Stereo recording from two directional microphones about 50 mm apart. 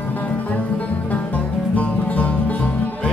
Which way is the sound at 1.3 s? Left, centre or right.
Left.